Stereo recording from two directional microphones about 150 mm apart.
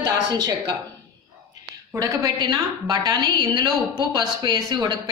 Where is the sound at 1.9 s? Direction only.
20° right (ahead or behind).